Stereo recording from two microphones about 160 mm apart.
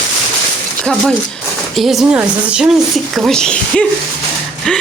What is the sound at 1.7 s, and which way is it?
Speech, centre (ahead or behind).